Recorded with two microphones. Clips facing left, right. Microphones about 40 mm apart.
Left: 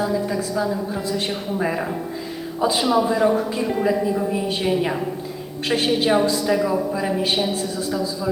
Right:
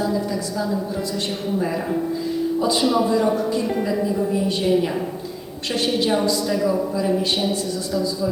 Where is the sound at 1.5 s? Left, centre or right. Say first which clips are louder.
Even; left.